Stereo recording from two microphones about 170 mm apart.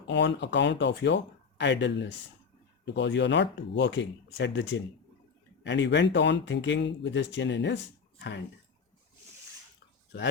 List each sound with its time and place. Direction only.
0.1 s speech: 90° left